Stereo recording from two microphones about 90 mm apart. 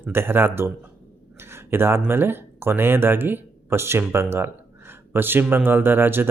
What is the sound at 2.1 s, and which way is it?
Speech, 25° right (ahead or behind).